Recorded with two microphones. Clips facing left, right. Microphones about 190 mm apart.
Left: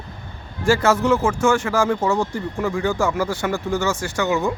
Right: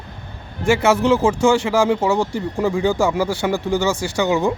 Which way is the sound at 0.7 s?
25° right (ahead or behind).